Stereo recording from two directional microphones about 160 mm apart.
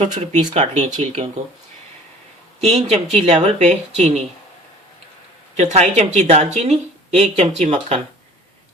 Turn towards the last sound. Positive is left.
turn(degrees=-45)  # may be behind; listen again after turning